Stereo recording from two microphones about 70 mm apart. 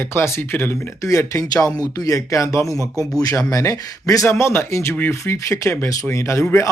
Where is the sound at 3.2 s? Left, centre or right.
Left.